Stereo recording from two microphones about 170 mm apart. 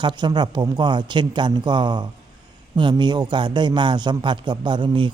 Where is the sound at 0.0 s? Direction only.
25° right (ahead or behind).